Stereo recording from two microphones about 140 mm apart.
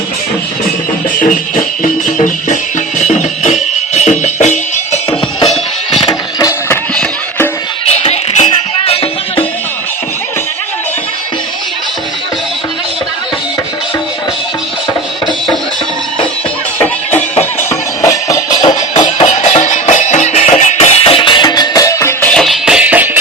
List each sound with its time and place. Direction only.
3.0 s music: 55° left (ahead or behind)
6.7 s music: 10° left (ahead or behind)
7.9 s music: 50° left (ahead or behind)
17.6 s music: 20° left (ahead or behind)
19.4 s music: 55° left (ahead or behind); by 22.3 s 20° left (ahead or behind)
22.3 s music: centre (ahead or behind)